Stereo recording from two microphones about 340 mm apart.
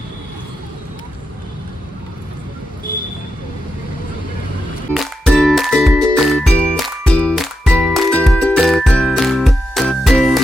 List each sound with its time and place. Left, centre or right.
2.9 s vehicle: left
4.9 s music: centre